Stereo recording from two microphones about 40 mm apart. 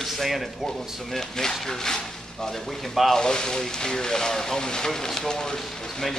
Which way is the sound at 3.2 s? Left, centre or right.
Centre.